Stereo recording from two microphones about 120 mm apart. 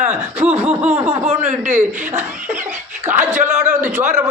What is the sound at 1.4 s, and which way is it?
Speech, 85° right.